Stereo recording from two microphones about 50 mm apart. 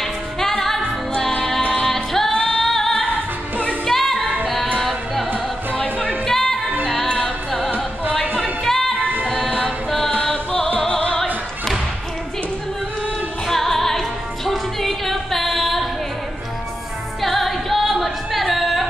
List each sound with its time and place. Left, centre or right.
0.0 s music: centre
3.8 s child singing: centre
4.7 s music: centre
7.1 s music: centre
8.4 s music: centre
10.3 s music: centre
13.5 s music: centre
17.2 s music: centre